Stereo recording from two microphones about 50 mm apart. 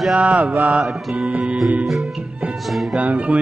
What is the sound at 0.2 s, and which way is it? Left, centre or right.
Mantra, right.